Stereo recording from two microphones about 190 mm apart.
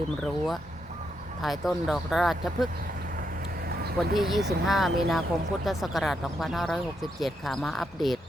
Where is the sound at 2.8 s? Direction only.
45° right (ahead or behind).